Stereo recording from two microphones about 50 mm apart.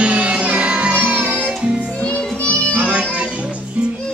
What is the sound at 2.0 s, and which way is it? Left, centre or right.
Music, left.